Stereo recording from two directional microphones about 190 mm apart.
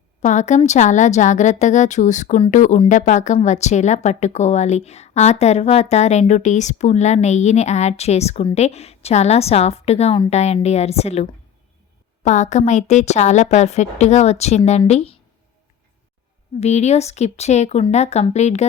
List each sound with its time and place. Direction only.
0.2 s speech: 40° left (ahead or behind)
16.6 s speech: 35° left (ahead or behind)